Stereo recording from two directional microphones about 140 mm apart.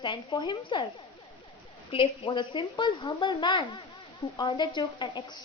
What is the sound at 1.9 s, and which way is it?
A woman's voice, 35° left (ahead or behind).